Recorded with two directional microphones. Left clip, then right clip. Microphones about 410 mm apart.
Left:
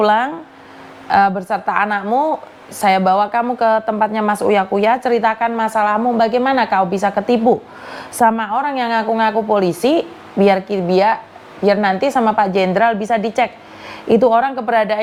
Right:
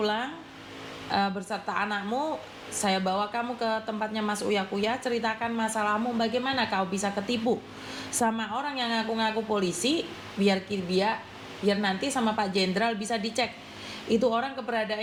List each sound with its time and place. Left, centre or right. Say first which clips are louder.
0.0 s a woman's voice: left 15 dB; left